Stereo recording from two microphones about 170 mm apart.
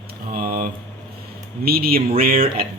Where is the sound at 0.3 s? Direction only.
60° right (ahead or behind).